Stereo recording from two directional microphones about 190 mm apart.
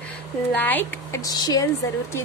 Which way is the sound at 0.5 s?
10° left (ahead or behind).